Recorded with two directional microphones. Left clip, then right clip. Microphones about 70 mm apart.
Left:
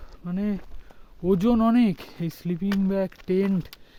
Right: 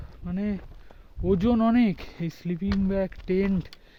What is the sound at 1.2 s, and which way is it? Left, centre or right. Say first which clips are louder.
Speech: left 2 dB; left.